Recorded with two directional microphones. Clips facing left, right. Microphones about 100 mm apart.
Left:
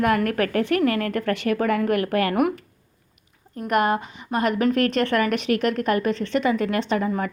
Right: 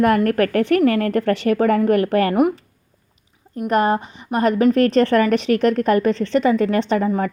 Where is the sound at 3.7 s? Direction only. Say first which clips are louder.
Right 3 dB; 30° right (ahead or behind).